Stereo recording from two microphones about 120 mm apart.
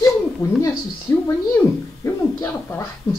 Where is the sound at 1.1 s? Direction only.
25° left (ahead or behind).